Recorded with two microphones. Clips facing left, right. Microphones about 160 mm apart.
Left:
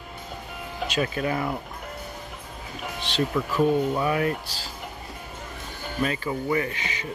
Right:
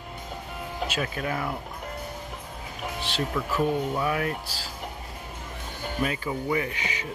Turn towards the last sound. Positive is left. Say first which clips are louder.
# left 1 dB
turn(degrees=-10)  # may be behind; listen again after turning